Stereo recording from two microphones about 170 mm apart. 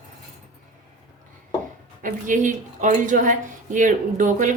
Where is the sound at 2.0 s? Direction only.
50° right (ahead or behind).